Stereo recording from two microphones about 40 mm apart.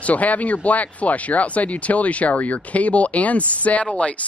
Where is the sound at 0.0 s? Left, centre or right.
Left.